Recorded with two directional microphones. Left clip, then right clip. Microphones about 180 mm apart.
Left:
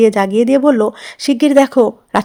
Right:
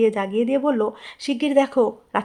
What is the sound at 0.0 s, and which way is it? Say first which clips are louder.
Speech: left 9 dB; 35° left (ahead or behind).